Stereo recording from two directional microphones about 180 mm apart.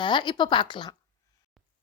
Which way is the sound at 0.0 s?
25° left (ahead or behind).